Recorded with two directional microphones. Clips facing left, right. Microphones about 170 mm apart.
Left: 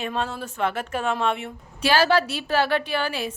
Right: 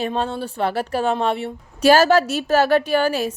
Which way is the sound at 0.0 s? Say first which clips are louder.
Right 5 dB; 35° right (ahead or behind).